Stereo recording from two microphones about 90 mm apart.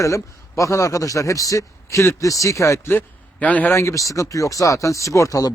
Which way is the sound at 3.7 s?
30° left (ahead or behind).